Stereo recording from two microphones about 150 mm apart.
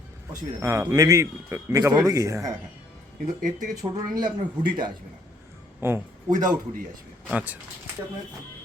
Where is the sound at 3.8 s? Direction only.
25° right (ahead or behind).